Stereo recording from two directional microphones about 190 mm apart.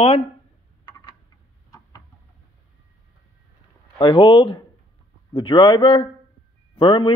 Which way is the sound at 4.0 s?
25° left (ahead or behind).